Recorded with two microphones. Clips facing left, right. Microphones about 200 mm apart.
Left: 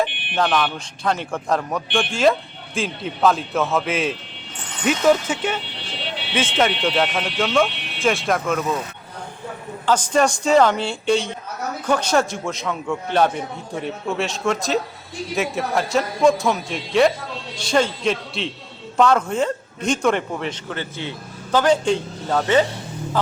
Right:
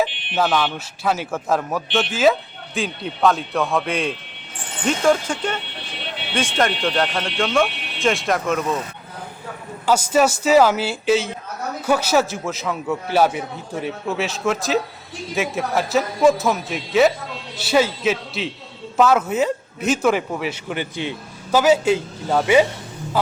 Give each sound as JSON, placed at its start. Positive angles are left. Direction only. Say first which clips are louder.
{"t": 0.0, "sound": "speech", "louder": "right 1 dB", "side_deg": -5}
{"t": 9.8, "sound": "a man's voice", "louder": "right 1 dB", "side_deg": -10}